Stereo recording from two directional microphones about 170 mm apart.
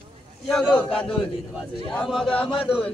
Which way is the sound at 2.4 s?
30° left (ahead or behind).